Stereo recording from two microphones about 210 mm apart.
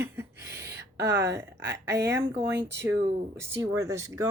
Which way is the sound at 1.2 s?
15° right (ahead or behind).